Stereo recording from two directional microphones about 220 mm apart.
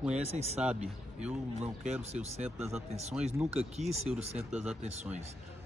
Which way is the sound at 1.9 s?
5° right (ahead or behind).